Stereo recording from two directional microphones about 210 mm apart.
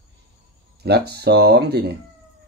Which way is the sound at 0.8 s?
50° right (ahead or behind).